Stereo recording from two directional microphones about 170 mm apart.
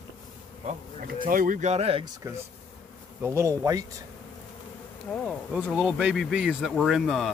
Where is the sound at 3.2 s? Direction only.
15° right (ahead or behind).